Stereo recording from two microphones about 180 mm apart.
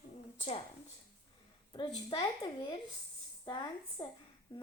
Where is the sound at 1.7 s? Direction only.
25° left (ahead or behind).